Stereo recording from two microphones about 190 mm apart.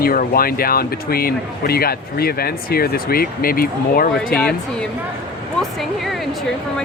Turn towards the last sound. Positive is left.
turn(degrees=0)  # may be behind; listen again after turning